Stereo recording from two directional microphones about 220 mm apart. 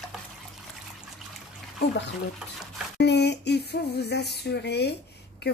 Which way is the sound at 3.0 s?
50° left (ahead or behind).